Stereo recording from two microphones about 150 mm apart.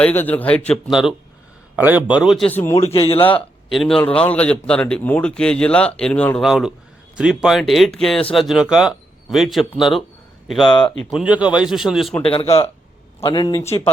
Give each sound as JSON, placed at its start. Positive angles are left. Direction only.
{"t": 0.0, "sound": "a man's voice", "side_deg": 10}
{"t": 0.9, "sound": "a man's voice", "side_deg": -5}
{"t": 2.5, "sound": "a man's voice", "side_deg": 15}
{"t": 2.7, "sound": "speech", "side_deg": 40}
{"t": 3.7, "sound": "a man's voice", "side_deg": 0}
{"t": 6.5, "sound": "speech", "side_deg": -5}
{"t": 12.2, "sound": "speech", "side_deg": 40}
{"t": 13.2, "sound": "speech", "side_deg": 30}
{"t": 13.6, "sound": "a man's voice", "side_deg": 15}